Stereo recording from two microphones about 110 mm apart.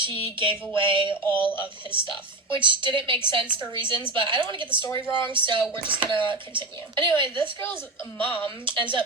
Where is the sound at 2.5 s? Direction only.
50° right (ahead or behind).